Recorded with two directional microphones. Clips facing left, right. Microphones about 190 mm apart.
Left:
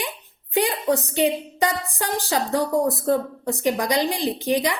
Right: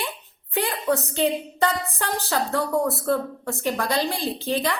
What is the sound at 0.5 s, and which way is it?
A woman's voice, 15° left (ahead or behind).